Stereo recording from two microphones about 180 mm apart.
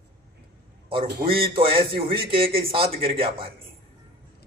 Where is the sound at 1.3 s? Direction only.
30° right (ahead or behind).